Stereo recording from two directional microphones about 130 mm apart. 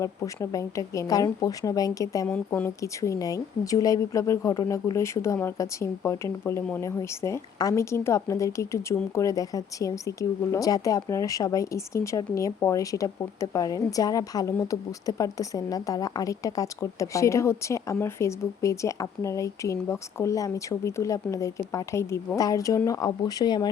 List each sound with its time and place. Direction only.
0.0 s a woman's voice: 25° left (ahead or behind)
2.2 s a woman's voice: 10° left (ahead or behind)
2.6 s a woman's voice: 25° left (ahead or behind)